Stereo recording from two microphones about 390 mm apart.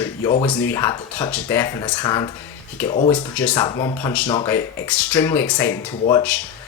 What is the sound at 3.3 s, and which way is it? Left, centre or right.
Speech, centre.